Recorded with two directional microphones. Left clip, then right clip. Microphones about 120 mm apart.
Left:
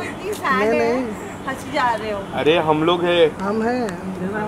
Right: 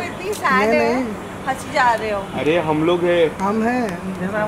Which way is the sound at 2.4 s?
40° left (ahead or behind).